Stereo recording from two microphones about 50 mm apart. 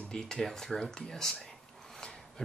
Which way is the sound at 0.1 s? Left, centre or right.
Centre.